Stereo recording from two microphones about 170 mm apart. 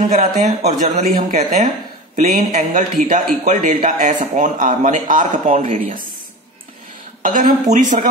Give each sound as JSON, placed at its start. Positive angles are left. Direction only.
{"t": 0.1, "sound": "a man's voice", "side_deg": -45}
{"t": 7.2, "sound": "a man's voice", "side_deg": -50}